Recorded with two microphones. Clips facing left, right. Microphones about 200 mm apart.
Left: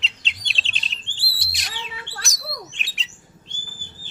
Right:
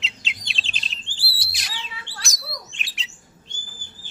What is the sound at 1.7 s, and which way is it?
Bird, 55° left (ahead or behind).